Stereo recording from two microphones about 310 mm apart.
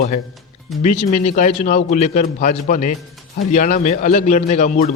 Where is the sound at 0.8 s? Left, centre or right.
Left.